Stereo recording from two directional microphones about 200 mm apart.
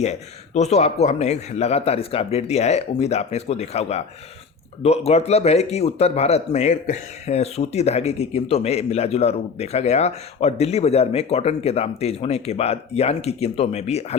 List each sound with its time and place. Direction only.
0.0 s speech: 35° left (ahead or behind)